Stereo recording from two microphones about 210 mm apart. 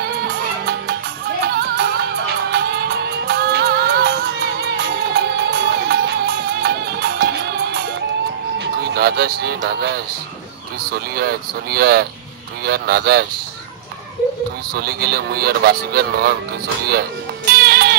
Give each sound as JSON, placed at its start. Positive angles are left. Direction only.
{"t": 0.0, "sound": "music", "side_deg": -50}
{"t": 8.5, "sound": "speech", "side_deg": -50}
{"t": 14.7, "sound": "speech", "side_deg": -50}
{"t": 17.5, "sound": "music", "side_deg": -50}